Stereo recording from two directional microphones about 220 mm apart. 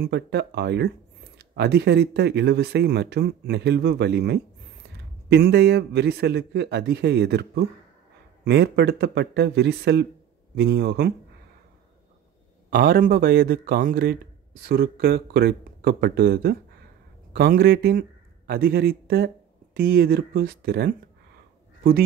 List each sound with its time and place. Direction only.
0.0 s speech: 50° right (ahead or behind)
12.6 s speech: 45° right (ahead or behind)